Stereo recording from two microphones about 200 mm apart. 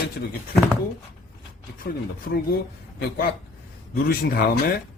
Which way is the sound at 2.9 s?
50° left (ahead or behind).